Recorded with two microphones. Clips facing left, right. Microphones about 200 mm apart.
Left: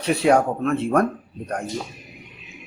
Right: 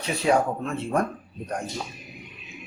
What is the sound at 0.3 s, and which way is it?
Speech, 65° left (ahead or behind).